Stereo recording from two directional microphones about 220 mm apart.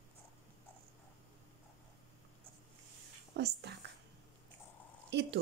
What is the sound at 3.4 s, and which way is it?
Speech, 50° right (ahead or behind).